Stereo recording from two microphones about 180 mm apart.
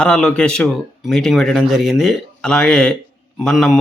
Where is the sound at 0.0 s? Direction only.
5° left (ahead or behind).